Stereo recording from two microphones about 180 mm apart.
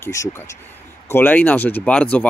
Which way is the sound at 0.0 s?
15° left (ahead or behind).